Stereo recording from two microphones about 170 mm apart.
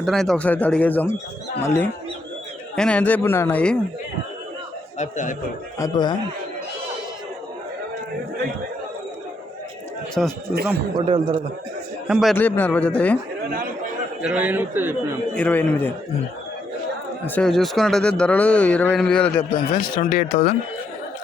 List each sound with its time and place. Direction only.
0.0 s speech: centre (ahead or behind)
4.9 s speech: 50° left (ahead or behind)
5.8 s a man's voice: 25° left (ahead or behind)
10.2 s speech: 5° right (ahead or behind)
10.9 s a man's voice: 35° right (ahead or behind)
12.0 s speech: centre (ahead or behind)
12.4 s speech: 10° left (ahead or behind)
14.2 s a man's voice: 5° right (ahead or behind)
15.4 s speech: 10° left (ahead or behind)
17.2 s speech: 5° left (ahead or behind)
19.4 s a man's voice: 30° left (ahead or behind)
20.0 s speech: 55° left (ahead or behind)